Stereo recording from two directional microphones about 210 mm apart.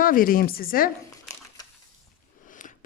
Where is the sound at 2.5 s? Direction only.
40° left (ahead or behind).